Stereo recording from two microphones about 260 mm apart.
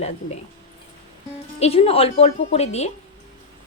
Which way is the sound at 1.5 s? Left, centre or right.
Left.